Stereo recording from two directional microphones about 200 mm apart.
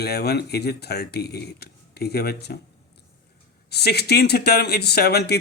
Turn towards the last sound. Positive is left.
turn(degrees=55)  # may be behind; listen again after turning